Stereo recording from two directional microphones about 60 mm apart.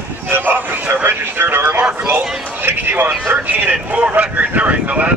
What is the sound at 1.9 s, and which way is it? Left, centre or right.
A man's voice, right.